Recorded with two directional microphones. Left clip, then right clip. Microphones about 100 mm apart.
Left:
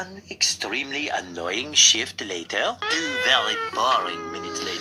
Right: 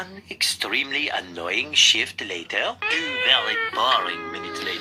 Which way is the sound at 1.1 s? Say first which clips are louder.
Even; 30° left (ahead or behind).